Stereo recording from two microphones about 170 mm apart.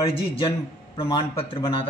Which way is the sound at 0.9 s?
25° left (ahead or behind).